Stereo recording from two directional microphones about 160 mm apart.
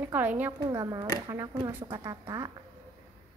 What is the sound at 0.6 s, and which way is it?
A woman's voice, 25° right (ahead or behind).